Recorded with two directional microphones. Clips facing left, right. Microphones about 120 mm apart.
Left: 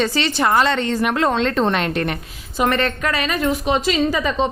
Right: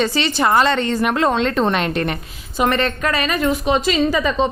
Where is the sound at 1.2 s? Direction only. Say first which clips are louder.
Even; 10° right (ahead or behind).